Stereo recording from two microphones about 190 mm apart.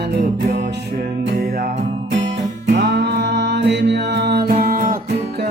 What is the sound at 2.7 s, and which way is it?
Mantra, 65° right (ahead or behind).